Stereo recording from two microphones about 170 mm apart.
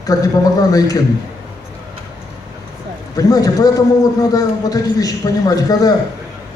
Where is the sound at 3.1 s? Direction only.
20° left (ahead or behind).